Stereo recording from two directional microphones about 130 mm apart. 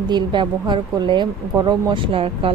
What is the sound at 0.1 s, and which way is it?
Speech, 35° right (ahead or behind).